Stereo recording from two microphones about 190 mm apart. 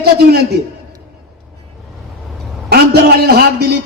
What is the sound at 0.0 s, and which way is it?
Speech, 55° right (ahead or behind).